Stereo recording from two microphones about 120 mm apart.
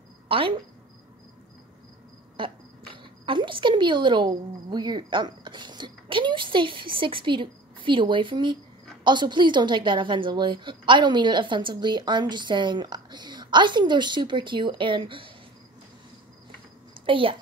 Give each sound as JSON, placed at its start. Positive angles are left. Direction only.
{"t": 0.3, "sound": "a woman's voice", "side_deg": -50}
{"t": 2.9, "sound": "a woman's voice", "side_deg": -45}
{"t": 17.0, "sound": "a child's voice", "side_deg": -45}